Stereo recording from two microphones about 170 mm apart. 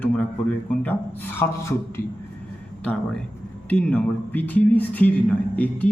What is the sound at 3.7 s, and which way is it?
Speech, 10° left (ahead or behind).